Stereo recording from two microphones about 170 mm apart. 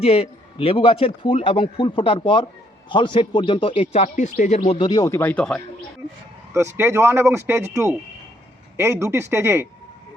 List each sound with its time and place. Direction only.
0.0 s a man's voice: 35° left (ahead or behind)
5.0 s speech: 15° left (ahead or behind)
6.5 s speech: 15° right (ahead or behind)